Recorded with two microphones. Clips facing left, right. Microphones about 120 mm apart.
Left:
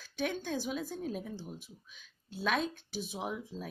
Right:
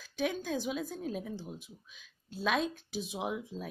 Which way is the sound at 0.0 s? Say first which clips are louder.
Right 2 dB; centre (ahead or behind).